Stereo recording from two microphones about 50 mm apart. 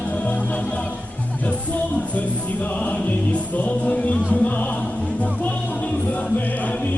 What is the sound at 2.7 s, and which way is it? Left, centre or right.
Music, left.